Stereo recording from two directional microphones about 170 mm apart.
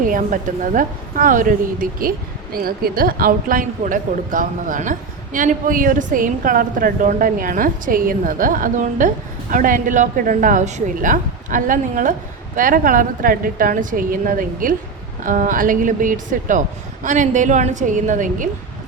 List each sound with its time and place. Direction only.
0.0 s a woman's voice: 50° right (ahead or behind)